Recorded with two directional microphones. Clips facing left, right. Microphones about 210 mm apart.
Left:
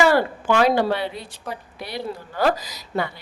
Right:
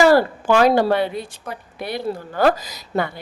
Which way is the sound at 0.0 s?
40° right (ahead or behind).